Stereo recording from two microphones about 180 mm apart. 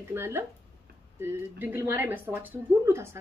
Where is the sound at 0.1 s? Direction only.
15° right (ahead or behind).